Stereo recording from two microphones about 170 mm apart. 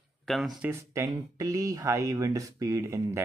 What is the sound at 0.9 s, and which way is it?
Speech, 20° right (ahead or behind).